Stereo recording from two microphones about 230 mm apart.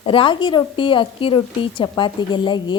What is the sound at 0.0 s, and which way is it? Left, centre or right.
A woman's voice, left.